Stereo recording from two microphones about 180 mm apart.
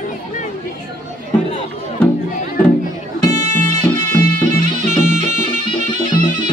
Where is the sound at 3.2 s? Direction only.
40° right (ahead or behind).